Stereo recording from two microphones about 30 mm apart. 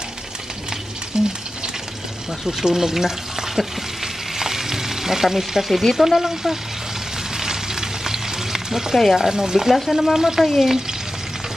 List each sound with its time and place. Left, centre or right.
1.1 s stir: right
2.4 s speech: centre
7.3 s frying: centre
9.1 s speech: centre
9.8 s speech: centre
10.1 s speech: centre
10.6 s stir: centre